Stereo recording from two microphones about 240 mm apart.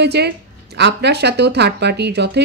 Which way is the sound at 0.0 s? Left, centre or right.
Right.